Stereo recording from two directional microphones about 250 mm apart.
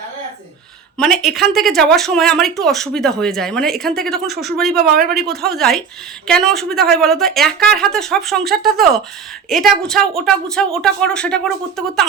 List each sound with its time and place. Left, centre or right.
0.9 s speech: centre
4.9 s a man's voice: right
5.2 s speech: centre